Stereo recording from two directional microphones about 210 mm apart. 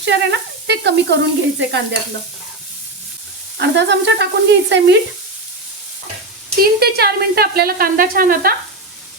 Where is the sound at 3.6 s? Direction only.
55° right (ahead or behind).